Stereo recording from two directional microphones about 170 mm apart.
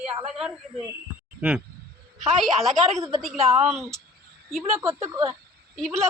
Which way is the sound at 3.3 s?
35° right (ahead or behind).